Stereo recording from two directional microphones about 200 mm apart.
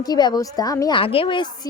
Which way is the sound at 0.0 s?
20° left (ahead or behind).